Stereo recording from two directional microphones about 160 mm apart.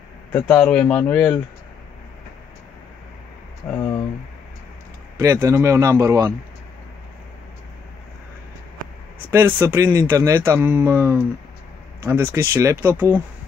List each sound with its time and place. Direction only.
0.3 s speech: 10° left (ahead or behind)
3.7 s speech: 15° left (ahead or behind)
5.2 s speech: 15° right (ahead or behind)
9.3 s speech: 15° right (ahead or behind)